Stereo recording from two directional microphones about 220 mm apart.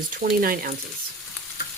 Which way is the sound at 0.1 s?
40° right (ahead or behind).